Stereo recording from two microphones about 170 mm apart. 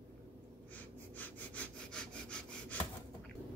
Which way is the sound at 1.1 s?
10° left (ahead or behind).